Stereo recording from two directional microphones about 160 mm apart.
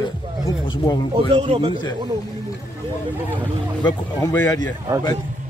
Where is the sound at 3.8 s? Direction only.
20° left (ahead or behind).